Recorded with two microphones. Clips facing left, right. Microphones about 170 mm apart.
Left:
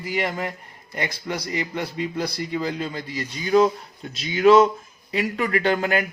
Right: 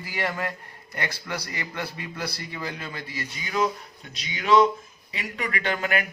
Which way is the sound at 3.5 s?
35° left (ahead or behind).